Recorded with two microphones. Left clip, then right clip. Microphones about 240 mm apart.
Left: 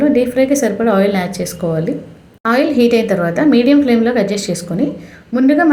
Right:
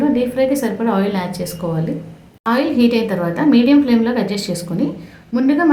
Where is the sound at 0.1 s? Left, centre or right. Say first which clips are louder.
Left 3 dB; centre.